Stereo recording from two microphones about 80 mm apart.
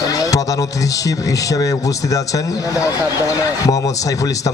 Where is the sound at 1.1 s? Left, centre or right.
Left.